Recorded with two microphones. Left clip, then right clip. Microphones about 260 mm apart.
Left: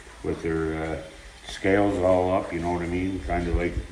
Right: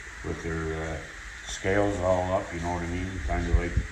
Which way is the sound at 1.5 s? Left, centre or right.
Right.